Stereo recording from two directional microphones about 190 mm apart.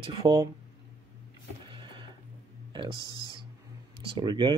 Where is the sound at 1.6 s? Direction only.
25° right (ahead or behind).